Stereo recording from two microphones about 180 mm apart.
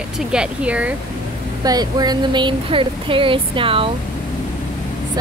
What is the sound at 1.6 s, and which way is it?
Speech, 20° right (ahead or behind).